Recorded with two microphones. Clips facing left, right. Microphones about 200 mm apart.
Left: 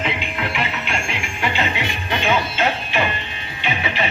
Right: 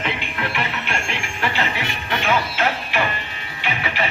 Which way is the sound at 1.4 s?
20° left (ahead or behind).